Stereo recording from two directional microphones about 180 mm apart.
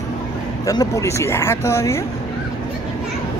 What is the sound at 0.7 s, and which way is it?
Speech, 20° left (ahead or behind).